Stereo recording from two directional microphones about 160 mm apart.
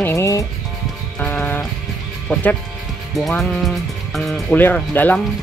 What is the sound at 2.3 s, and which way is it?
Speech, 10° left (ahead or behind).